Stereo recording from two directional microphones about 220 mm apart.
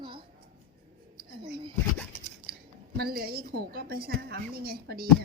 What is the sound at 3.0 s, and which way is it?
A woman's voice, 45° right (ahead or behind).